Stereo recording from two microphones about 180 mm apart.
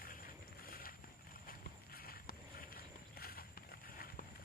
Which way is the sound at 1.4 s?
55° left (ahead or behind).